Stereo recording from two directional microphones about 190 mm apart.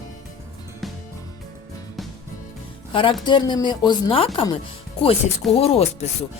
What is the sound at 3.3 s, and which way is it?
Speech, 25° left (ahead or behind).